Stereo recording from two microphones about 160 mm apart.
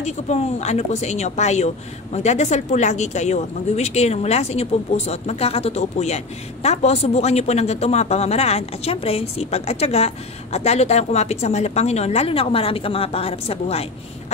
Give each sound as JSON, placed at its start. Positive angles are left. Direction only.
{"t": 0.0, "sound": "speech", "side_deg": 45}